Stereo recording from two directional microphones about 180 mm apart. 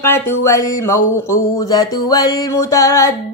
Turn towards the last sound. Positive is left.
turn(degrees=15)  # may be behind; listen again after turning